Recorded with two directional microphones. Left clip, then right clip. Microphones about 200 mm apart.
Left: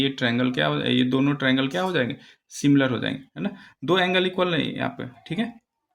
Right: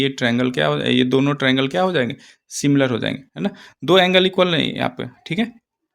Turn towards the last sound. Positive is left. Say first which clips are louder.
# right 6 dB
turn(degrees=-40)  # may be behind; listen again after turning